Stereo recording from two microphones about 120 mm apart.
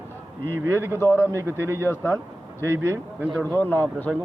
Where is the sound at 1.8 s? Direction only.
20° left (ahead or behind).